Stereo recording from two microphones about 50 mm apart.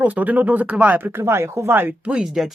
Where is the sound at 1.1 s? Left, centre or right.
Right.